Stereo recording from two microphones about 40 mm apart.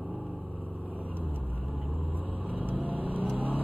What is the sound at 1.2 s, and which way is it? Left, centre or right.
Vehicle, right.